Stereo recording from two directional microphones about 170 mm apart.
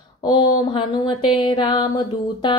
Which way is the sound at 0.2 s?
30° left (ahead or behind).